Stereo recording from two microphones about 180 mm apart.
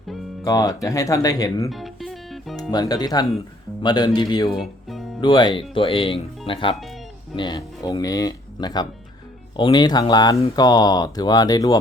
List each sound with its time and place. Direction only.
0.4 s speech: 20° left (ahead or behind)
1.7 s music: centre (ahead or behind)
2.6 s speech: 20° left (ahead or behind)
4.4 s speech: centre (ahead or behind)
5.2 s speech: 25° left (ahead or behind)